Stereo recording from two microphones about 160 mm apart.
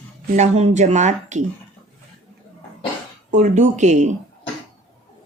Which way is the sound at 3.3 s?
45° right (ahead or behind).